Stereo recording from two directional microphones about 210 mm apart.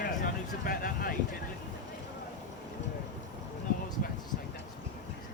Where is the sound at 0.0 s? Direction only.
40° left (ahead or behind).